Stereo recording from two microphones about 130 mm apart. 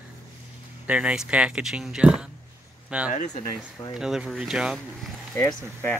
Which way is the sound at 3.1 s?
75° left (ahead or behind).